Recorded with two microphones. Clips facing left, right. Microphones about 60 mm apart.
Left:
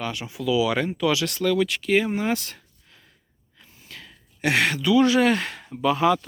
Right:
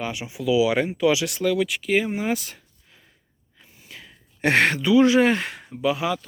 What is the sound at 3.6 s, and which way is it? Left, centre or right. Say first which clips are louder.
Gasp: even; centre.